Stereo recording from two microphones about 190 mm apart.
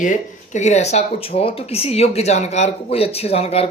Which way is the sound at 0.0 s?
40° left (ahead or behind).